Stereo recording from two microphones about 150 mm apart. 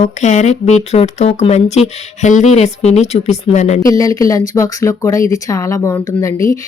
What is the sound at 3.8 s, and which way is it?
Speech, 20° left (ahead or behind).